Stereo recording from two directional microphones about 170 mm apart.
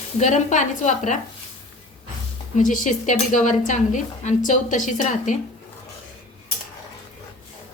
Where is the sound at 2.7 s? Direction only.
50° left (ahead or behind).